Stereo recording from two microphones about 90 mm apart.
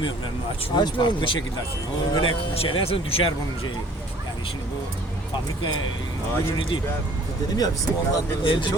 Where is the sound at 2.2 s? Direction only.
90° left.